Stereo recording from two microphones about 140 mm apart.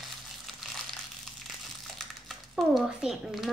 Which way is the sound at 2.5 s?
5° right (ahead or behind).